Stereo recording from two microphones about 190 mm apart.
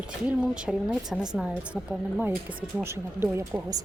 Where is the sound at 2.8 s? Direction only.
10° right (ahead or behind).